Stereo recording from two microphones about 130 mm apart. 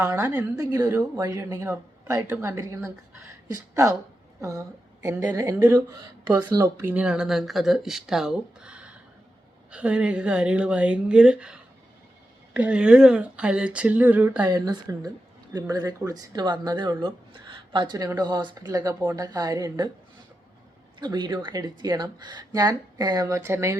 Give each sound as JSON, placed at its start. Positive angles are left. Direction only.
{"t": 0.0, "sound": "a woman's voice", "side_deg": -25}
{"t": 14.4, "sound": "a woman's voice", "side_deg": -30}
{"t": 21.0, "sound": "speech", "side_deg": -35}